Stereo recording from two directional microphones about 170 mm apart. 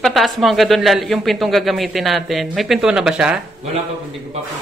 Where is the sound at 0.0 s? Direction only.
Centre (ahead or behind).